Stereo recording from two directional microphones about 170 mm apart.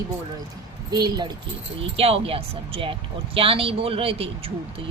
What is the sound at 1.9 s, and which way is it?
Speech, 35° right (ahead or behind).